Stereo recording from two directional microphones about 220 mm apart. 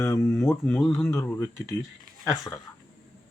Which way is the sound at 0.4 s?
5° left (ahead or behind).